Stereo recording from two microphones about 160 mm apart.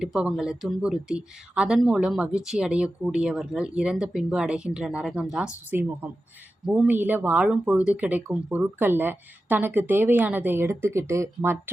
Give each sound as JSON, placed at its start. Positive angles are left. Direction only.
{"t": 0.0, "sound": "speech", "side_deg": -5}